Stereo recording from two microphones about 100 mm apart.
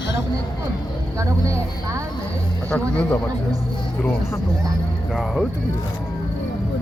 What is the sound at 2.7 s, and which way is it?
Speech, 15° left (ahead or behind).